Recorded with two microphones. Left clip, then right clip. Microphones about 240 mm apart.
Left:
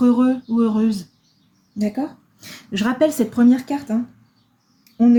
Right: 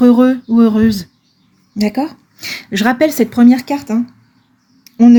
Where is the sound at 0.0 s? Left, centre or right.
Right.